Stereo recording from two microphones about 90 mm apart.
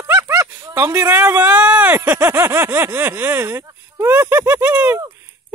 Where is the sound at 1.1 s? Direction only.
25° right (ahead or behind).